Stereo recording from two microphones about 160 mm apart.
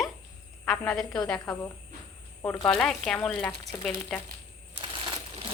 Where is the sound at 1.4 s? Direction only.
20° left (ahead or behind).